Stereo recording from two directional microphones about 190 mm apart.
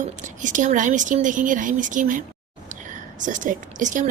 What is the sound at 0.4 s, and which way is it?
Speech, 40° right (ahead or behind).